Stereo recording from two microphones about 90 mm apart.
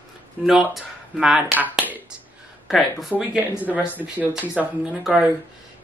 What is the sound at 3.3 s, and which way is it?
Speech, 15° right (ahead or behind).